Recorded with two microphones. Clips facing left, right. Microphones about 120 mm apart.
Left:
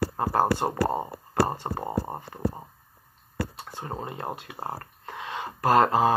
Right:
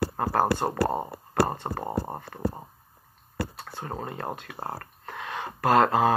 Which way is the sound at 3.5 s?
20° left (ahead or behind).